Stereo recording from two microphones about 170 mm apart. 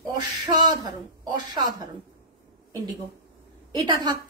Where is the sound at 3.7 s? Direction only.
25° right (ahead or behind).